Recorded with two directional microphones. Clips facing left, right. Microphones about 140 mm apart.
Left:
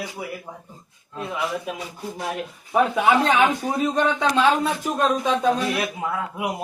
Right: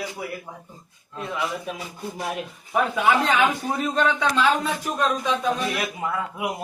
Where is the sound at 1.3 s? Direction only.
Centre (ahead or behind).